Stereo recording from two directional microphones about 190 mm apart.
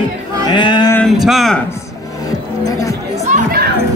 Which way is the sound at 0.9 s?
Centre (ahead or behind).